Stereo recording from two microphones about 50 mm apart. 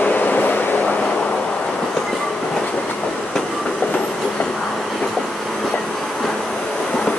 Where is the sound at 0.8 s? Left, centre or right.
Left.